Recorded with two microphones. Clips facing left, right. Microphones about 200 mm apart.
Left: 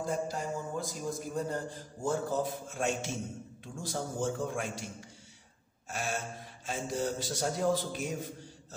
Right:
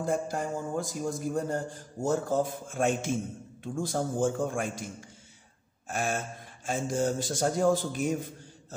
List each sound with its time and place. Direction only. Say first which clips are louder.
0.0 s a man's voice: right 4 dB; 50° right (ahead or behind)
5.9 s a man's voice: right 5 dB; 50° right (ahead or behind)